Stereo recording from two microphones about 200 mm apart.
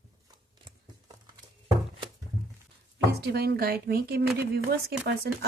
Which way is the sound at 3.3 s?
50° right (ahead or behind).